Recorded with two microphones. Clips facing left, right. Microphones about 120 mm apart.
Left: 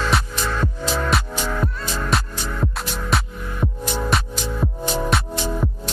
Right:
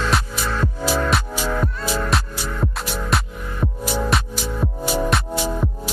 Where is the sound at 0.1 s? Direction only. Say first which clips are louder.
Even; 5° right (ahead or behind).